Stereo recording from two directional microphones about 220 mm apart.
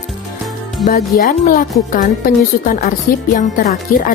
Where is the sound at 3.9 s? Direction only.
40° left (ahead or behind).